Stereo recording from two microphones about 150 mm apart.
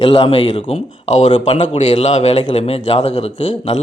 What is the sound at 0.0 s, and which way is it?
Speech, 40° left (ahead or behind).